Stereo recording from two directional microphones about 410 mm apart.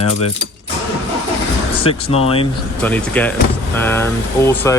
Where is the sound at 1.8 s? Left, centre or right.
Centre.